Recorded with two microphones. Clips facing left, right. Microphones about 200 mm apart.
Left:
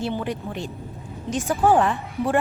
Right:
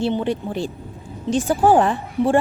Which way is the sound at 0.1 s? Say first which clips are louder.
Right 5 dB; 30° right (ahead or behind).